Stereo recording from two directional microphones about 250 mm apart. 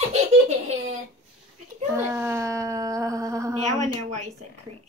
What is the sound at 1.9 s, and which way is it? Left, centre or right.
A woman's voice, centre.